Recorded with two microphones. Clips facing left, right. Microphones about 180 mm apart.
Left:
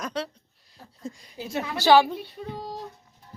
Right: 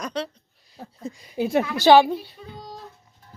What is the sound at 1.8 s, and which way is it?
Speech, 20° right (ahead or behind).